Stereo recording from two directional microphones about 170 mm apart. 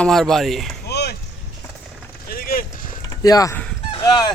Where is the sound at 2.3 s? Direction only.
55° left (ahead or behind).